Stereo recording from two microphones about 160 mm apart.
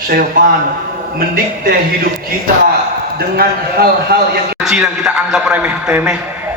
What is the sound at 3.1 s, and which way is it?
A man's voice, 75° right (ahead or behind).